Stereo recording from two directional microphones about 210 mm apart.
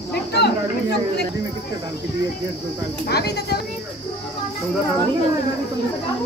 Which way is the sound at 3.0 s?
50° left (ahead or behind).